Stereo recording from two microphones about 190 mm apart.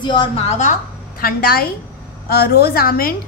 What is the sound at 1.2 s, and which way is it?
A woman's voice, 50° left (ahead or behind).